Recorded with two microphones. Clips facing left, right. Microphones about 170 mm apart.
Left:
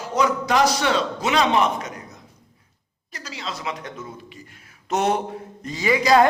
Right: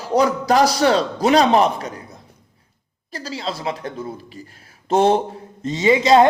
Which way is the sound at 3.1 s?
35° right (ahead or behind).